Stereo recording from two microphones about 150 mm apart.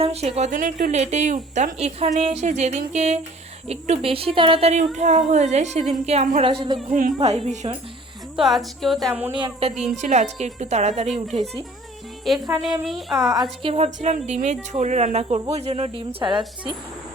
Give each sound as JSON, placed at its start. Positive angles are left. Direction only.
{"t": 0.0, "sound": "speech", "side_deg": -40}
{"t": 0.5, "sound": "speech", "side_deg": -60}
{"t": 7.2, "sound": "speech", "side_deg": -45}
{"t": 8.4, "sound": "speech", "side_deg": 0}
{"t": 9.1, "sound": "speech", "side_deg": -10}
{"t": 9.4, "sound": "speech", "side_deg": -40}
{"t": 12.2, "sound": "speech", "side_deg": 0}
{"t": 13.1, "sound": "speech", "side_deg": -25}